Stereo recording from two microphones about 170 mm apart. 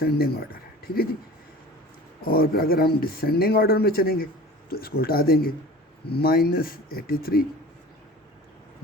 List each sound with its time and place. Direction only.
0.0 s speech: 65° left (ahead or behind)
2.2 s speech: 60° left (ahead or behind)